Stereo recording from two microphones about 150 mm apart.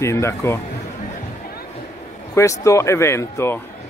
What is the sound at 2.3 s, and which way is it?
Speech, 20° left (ahead or behind).